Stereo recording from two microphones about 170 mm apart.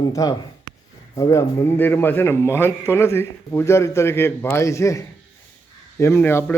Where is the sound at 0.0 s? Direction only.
20° left (ahead or behind).